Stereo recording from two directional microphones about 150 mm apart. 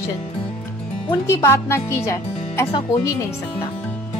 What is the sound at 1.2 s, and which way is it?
Speech, 20° left (ahead or behind).